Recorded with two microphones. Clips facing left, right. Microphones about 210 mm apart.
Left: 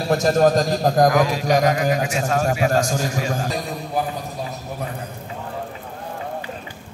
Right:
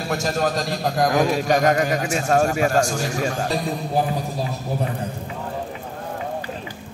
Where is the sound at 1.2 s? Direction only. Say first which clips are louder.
Even; 45° right (ahead or behind).